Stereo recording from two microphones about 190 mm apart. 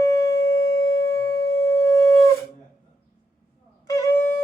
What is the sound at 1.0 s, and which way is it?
Music, 15° left (ahead or behind).